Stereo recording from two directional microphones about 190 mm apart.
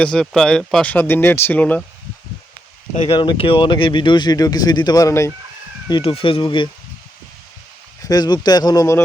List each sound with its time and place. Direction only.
0.0 s speech: 5° left (ahead or behind)
2.9 s speech: 30° left (ahead or behind)
5.9 s speech: 30° left (ahead or behind)
8.0 s speech: 20° left (ahead or behind)